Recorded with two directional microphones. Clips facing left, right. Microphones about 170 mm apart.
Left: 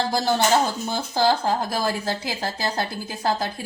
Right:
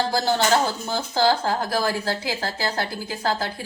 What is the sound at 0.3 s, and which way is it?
A woman's voice, 15° left (ahead or behind).